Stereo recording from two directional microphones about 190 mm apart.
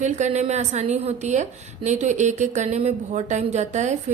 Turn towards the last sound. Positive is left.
turn(degrees=-35)  # may be behind; listen again after turning